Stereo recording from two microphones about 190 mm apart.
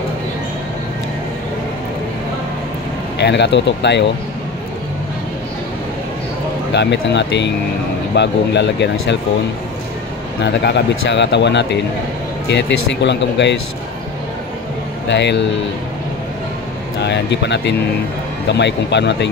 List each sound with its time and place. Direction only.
3.2 s speech: 65° left (ahead or behind)
6.7 s speech: 65° left (ahead or behind)
10.4 s speech: 65° left (ahead or behind)
15.0 s speech: 65° left (ahead or behind)
17.0 s speech: 65° left (ahead or behind)